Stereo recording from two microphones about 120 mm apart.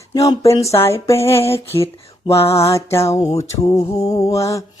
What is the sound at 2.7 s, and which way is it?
Speech, 25° left (ahead or behind).